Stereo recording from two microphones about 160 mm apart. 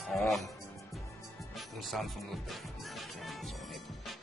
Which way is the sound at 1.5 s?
Centre (ahead or behind).